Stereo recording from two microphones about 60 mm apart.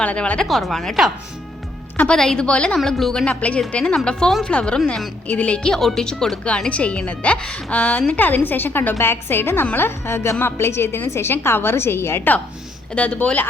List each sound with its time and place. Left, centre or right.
0.0 s a woman's voice: left
0.4 s a woman's voice: centre
2.1 s speech: centre
2.7 s speech: centre
3.2 s a woman's voice: left
5.6 s a woman's voice: centre; by 12.3 s left
12.9 s a woman's voice: left